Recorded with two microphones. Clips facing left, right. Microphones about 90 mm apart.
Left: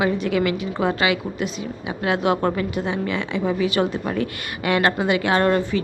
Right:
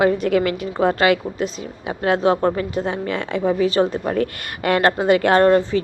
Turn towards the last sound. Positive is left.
turn(degrees=-35)  # may be behind; listen again after turning